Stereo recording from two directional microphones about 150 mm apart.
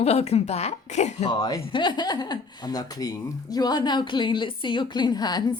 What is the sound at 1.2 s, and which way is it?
Speech, 25° left (ahead or behind).